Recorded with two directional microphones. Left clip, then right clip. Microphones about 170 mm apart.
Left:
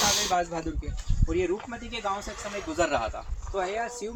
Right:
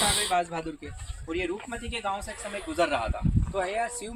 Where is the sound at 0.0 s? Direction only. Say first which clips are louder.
Left 1 dB; 10° left (ahead or behind).